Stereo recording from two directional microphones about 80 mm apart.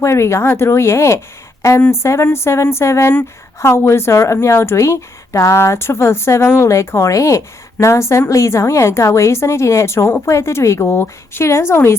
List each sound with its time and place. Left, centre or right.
0.0 s a woman's voice: left